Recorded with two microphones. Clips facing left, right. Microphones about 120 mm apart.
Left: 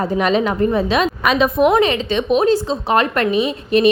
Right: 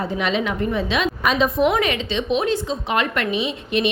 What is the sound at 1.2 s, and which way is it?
Speech, 65° left (ahead or behind).